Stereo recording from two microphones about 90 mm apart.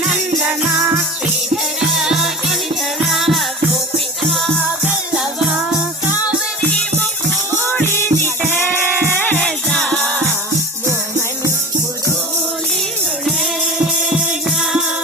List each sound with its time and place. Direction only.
1.8 s music: 5° right (ahead or behind)
7.6 s music: 20° left (ahead or behind)